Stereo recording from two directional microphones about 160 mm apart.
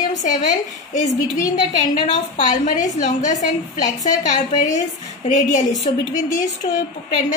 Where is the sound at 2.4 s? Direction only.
50° left (ahead or behind).